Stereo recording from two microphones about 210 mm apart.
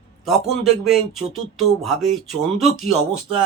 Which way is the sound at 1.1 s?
30° right (ahead or behind).